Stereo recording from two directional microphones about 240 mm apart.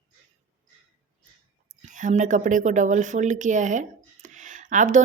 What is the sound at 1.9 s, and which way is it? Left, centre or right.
Speech, right.